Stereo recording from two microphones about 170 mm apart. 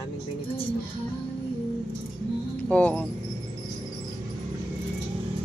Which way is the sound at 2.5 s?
10° left (ahead or behind).